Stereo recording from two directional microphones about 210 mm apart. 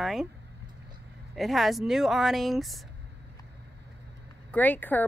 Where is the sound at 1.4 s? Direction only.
Centre (ahead or behind).